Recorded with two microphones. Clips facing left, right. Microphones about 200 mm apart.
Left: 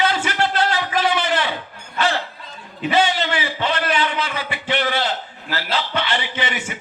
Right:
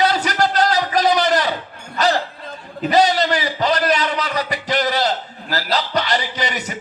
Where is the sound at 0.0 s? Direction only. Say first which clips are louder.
Right 3 dB; 40° right (ahead or behind).